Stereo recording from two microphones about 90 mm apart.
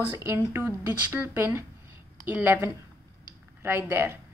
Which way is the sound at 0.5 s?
25° right (ahead or behind).